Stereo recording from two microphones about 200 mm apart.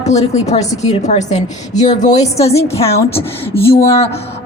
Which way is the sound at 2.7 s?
30° left (ahead or behind).